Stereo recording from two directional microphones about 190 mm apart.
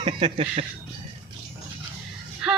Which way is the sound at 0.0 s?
30° right (ahead or behind).